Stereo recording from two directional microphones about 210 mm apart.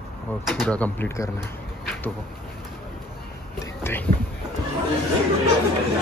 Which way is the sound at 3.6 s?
10° left (ahead or behind).